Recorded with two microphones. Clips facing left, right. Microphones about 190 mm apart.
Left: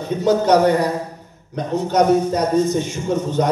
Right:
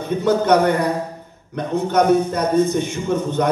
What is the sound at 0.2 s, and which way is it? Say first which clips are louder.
Speech: left 1 dB; 55° right (ahead or behind).